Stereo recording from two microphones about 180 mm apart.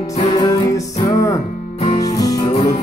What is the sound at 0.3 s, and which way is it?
Music, 20° left (ahead or behind).